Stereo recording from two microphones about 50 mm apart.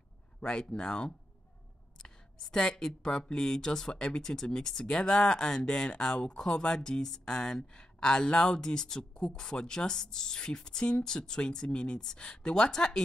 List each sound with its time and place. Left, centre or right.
0.4 s speech: centre